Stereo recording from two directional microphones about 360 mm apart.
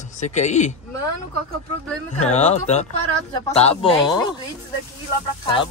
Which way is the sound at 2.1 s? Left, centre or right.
Centre.